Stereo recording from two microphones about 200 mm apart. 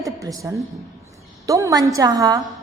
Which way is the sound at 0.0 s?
15° right (ahead or behind).